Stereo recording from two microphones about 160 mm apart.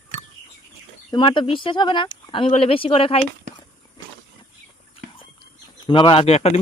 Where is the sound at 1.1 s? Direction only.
30° left (ahead or behind).